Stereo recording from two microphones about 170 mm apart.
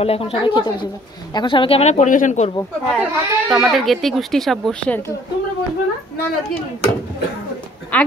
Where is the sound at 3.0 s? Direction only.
15° right (ahead or behind).